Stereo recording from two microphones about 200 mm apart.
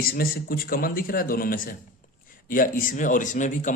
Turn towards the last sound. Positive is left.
turn(degrees=40)  # may be behind; listen again after turning